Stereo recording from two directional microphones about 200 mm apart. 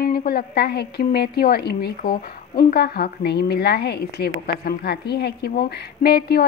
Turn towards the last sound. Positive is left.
turn(degrees=50)  # may be behind; listen again after turning